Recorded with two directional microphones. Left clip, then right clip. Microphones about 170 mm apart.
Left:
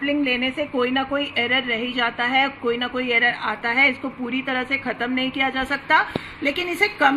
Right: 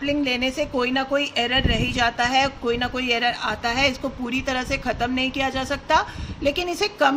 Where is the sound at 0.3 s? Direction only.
25° right (ahead or behind).